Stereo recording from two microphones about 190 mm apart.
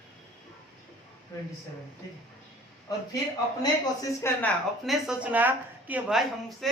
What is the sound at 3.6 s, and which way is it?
Speech, 20° left (ahead or behind).